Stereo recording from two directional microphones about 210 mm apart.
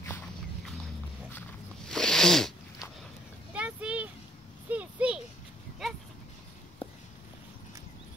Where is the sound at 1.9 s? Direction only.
5° left (ahead or behind).